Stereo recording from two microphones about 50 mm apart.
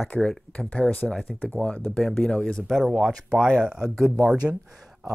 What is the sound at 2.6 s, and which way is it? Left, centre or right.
Speech, centre.